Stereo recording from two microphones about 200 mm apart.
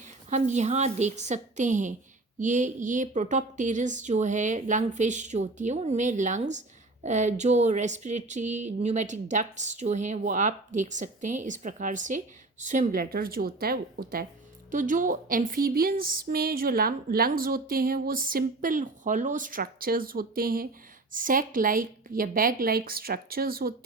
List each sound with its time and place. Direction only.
0.3 s speech: 35° right (ahead or behind)